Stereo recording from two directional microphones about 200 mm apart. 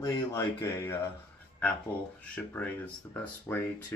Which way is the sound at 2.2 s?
5° left (ahead or behind).